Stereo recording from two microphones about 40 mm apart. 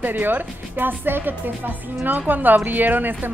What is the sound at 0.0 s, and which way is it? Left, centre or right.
A woman's voice, right.